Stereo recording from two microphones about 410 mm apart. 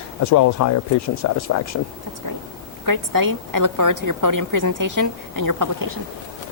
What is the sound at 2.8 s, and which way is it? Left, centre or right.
A woman's voice, right.